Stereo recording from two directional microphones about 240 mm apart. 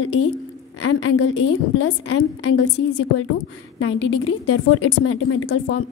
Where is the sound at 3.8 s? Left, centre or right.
Left.